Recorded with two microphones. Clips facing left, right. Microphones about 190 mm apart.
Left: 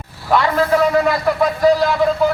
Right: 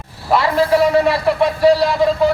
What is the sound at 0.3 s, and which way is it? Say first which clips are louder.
Speech: even; 5° right (ahead or behind).